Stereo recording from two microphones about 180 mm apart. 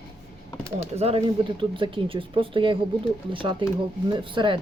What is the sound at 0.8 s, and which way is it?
Speech, 35° right (ahead or behind).